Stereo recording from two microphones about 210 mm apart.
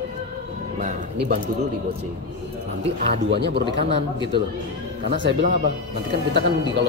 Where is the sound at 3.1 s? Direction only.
55° right (ahead or behind).